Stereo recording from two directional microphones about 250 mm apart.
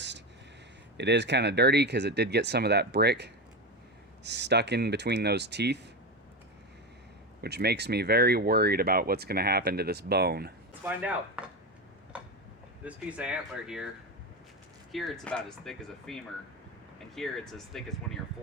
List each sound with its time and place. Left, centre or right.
0.9 s speech: right
7.4 s speech: right
10.8 s speech: centre
12.8 s speech: centre
14.9 s speech: centre